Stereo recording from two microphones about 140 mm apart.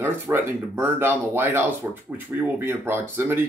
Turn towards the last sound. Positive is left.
turn(degrees=-15)  # may be behind; listen again after turning